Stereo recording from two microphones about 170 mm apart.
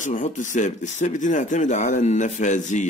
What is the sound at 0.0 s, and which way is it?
Speech, 45° left (ahead or behind).